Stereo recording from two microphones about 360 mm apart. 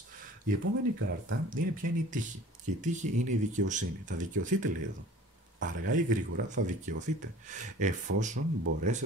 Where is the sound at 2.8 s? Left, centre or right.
Centre.